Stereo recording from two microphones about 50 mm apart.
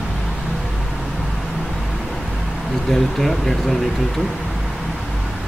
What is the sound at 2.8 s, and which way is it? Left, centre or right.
Speech, centre.